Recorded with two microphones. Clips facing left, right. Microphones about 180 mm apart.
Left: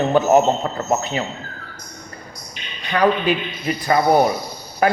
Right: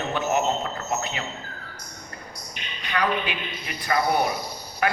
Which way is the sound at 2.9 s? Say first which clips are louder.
Left 8 dB; 35° left (ahead or behind).